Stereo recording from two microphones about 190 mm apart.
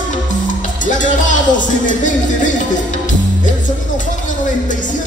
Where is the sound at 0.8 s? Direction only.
40° left (ahead or behind).